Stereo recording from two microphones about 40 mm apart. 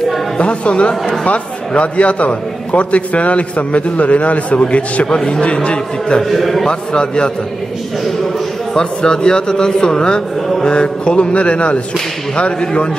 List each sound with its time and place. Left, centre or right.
0.4 s a man's voice: left
5.0 s a man's voice: left
6.2 s a man's voice: centre
6.7 s a man's voice: left
8.7 s a man's voice: centre